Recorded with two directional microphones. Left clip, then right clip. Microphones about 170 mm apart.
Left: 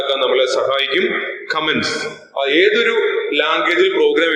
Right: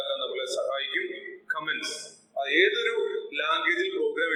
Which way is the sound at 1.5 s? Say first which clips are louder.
Left 12 dB; 30° left (ahead or behind).